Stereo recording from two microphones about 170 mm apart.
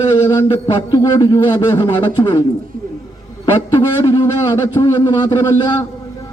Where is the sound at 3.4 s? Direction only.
25° left (ahead or behind).